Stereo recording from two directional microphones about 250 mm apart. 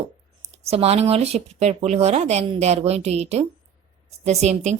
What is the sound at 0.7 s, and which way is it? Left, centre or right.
A woman's voice, right.